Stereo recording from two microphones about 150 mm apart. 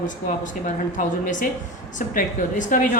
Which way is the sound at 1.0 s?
60° left (ahead or behind).